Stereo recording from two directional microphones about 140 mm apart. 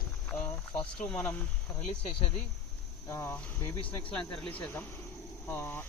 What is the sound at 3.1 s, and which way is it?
Speech, 15° left (ahead or behind).